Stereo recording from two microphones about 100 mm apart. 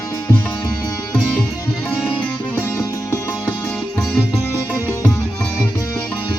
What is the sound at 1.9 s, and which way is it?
Music, 20° left (ahead or behind).